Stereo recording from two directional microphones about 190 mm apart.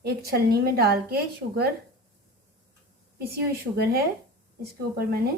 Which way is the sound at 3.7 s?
55° right (ahead or behind).